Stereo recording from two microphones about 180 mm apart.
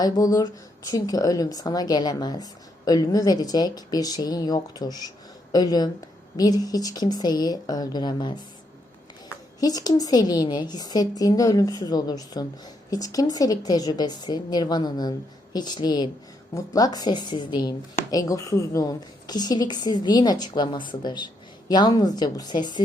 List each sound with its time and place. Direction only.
0.0 s a woman's voice: 20° left (ahead or behind)
9.6 s a woman's voice: 20° left (ahead or behind)